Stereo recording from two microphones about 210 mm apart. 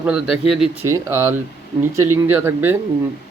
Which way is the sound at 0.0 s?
Centre (ahead or behind).